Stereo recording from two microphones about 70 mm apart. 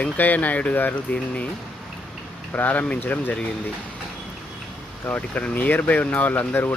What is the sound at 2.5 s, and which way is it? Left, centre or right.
Speech, left.